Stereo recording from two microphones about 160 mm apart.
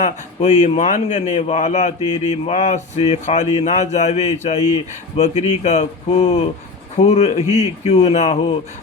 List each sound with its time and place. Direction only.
0.0 s a man's voice: 45° left (ahead or behind)